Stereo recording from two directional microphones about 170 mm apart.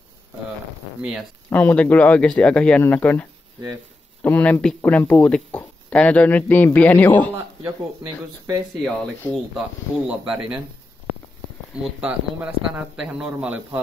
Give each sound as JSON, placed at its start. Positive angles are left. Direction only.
{"t": 1.5, "sound": "speech", "side_deg": 10}
{"t": 9.2, "sound": "speech", "side_deg": 0}
{"t": 11.7, "sound": "speech", "side_deg": -5}